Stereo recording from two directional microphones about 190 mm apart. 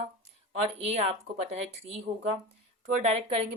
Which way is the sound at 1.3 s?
70° right (ahead or behind).